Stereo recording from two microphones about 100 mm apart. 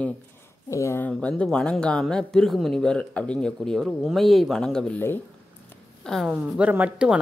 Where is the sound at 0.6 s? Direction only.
30° left (ahead or behind).